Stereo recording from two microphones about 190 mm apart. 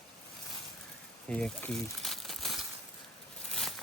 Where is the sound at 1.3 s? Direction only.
5° left (ahead or behind).